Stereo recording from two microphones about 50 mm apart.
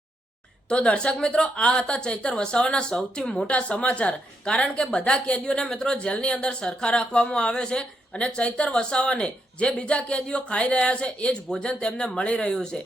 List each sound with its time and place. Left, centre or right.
0.7 s a woman's voice: centre
3.5 s a woman's voice: left